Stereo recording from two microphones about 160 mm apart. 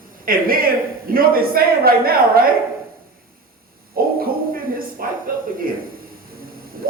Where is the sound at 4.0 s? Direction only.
65° right (ahead or behind).